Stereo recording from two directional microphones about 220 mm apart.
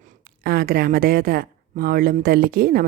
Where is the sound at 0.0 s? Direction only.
45° right (ahead or behind).